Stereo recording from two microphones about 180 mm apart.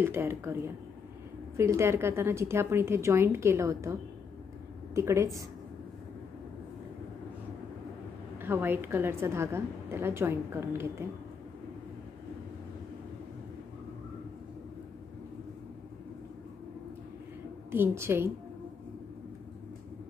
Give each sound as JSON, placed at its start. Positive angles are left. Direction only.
{"t": 0.0, "sound": "a woman's voice", "side_deg": -15}
{"t": 1.6, "sound": "a woman's voice", "side_deg": -15}
{"t": 8.4, "sound": "a woman's voice", "side_deg": -10}
{"t": 17.6, "sound": "a woman's voice", "side_deg": -15}